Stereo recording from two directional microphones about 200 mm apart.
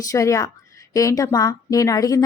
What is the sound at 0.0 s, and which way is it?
A woman's voice, 15° left (ahead or behind).